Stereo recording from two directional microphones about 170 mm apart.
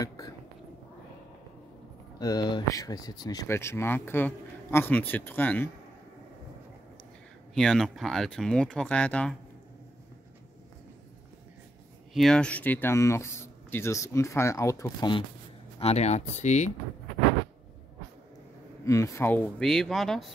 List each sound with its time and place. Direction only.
2.1 s speech: 25° left (ahead or behind)
7.5 s speech: 5° left (ahead or behind)
12.1 s speech: centre (ahead or behind); by 15.2 s 25° left (ahead or behind)
15.8 s speech: 40° left (ahead or behind)
18.9 s speech: 15° left (ahead or behind); by 20.2 s centre (ahead or behind)